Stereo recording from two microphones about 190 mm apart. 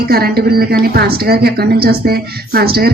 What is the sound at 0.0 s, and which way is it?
A woman's voice, 55° right (ahead or behind).